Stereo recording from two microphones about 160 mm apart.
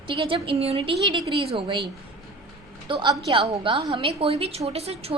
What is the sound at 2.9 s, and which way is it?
A woman's voice, 30° right (ahead or behind).